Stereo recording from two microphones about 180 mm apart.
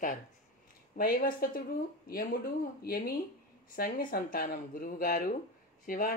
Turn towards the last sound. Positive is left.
turn(degrees=50)  # may be behind; listen again after turning